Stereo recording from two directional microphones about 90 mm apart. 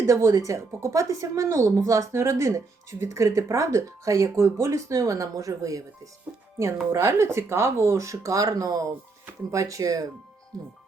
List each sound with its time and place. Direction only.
0.0 s speech: 35° right (ahead or behind)